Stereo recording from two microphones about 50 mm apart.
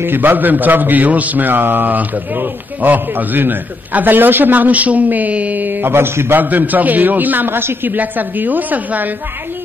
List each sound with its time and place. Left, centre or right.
0.0 s a man's voice: right